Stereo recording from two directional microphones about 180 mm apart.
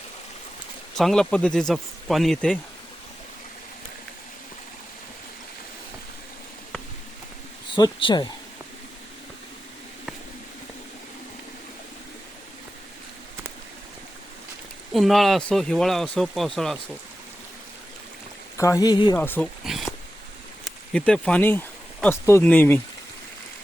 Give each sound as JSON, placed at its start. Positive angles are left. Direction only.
{"t": 0.9, "sound": "speech", "side_deg": 0}
{"t": 7.8, "sound": "speech", "side_deg": 25}
{"t": 14.9, "sound": "speech", "side_deg": 0}
{"t": 18.5, "sound": "speech", "side_deg": 20}
{"t": 19.1, "sound": "speech", "side_deg": 10}
{"t": 19.6, "sound": "speech", "side_deg": 0}